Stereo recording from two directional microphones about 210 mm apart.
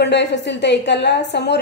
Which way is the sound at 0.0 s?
55° left (ahead or behind).